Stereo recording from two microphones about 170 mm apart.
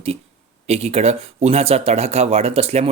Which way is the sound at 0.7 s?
40° right (ahead or behind).